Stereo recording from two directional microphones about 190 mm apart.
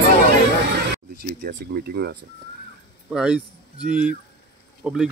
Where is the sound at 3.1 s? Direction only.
5° right (ahead or behind).